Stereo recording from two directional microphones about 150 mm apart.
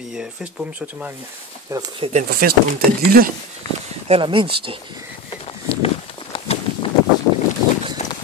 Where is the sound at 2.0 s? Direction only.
50° right (ahead or behind).